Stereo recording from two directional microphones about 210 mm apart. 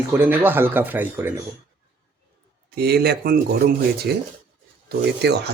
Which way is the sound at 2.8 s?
50° right (ahead or behind).